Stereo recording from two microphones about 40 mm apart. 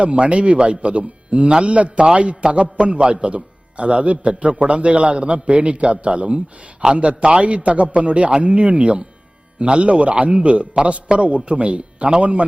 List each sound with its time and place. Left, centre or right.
0.0 s speech: right